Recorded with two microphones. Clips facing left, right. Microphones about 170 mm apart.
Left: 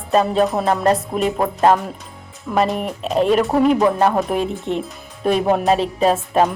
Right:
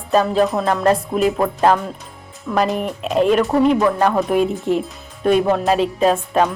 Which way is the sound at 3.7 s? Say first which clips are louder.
Left 1 dB; 20° left (ahead or behind).